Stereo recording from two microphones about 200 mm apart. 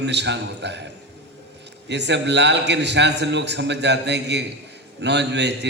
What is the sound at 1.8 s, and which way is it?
A man's voice, 60° right (ahead or behind).